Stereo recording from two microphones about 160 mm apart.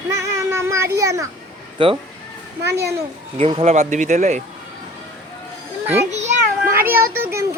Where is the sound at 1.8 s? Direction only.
30° right (ahead or behind).